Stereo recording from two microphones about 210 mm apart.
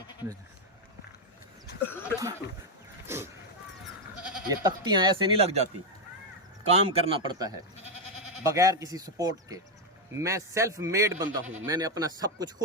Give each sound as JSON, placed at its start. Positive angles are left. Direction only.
{"t": 1.9, "sound": "a sound", "side_deg": 10}
{"t": 3.1, "sound": "speech", "side_deg": -10}
{"t": 4.4, "sound": "speech", "side_deg": -20}
{"t": 6.7, "sound": "speech", "side_deg": -30}